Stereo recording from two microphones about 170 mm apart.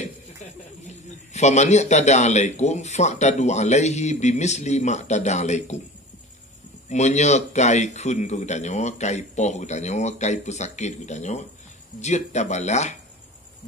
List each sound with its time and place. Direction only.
1.3 s a man's voice: 40° left (ahead or behind)
6.9 s a man's voice: 45° left (ahead or behind)